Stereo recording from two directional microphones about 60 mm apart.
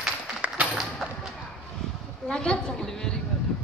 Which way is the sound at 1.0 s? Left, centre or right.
Centre.